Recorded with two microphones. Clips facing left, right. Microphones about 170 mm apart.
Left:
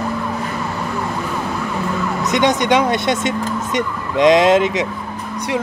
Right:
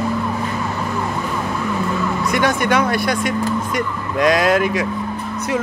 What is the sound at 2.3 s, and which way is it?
A woman's voice, 20° left (ahead or behind).